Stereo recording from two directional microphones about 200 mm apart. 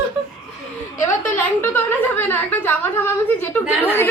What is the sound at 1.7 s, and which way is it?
A woman's voice, 10° left (ahead or behind).